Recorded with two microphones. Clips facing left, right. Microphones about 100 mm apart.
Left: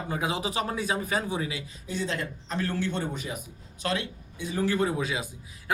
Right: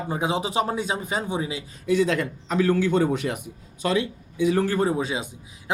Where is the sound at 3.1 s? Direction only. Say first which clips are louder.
Right 9 dB; 75° right (ahead or behind).